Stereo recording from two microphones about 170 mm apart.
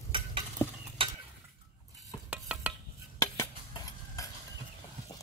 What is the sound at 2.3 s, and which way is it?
Stir, 5° right (ahead or behind).